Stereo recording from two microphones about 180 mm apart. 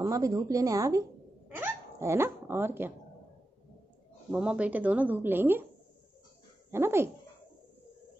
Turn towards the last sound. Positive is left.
turn(degrees=-15)  # may be behind; listen again after turning